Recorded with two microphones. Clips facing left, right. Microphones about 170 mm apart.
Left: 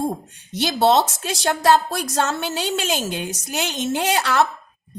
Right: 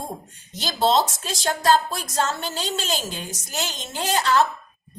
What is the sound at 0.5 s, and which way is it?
A woman's voice, 65° left (ahead or behind).